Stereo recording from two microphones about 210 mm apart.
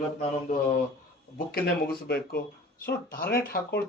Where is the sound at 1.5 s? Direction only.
45° left (ahead or behind).